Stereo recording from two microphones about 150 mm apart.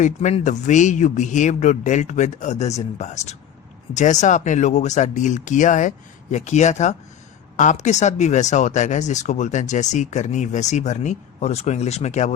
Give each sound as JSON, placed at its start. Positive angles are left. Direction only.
{"t": 0.0, "sound": "a man's voice", "side_deg": 55}